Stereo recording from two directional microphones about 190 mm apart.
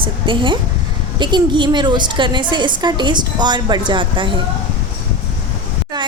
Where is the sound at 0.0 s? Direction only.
25° right (ahead or behind).